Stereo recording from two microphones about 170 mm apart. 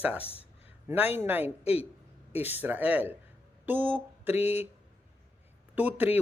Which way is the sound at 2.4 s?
10° right (ahead or behind).